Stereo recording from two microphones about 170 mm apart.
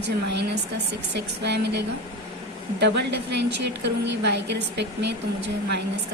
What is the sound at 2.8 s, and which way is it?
A woman's voice, 90° right.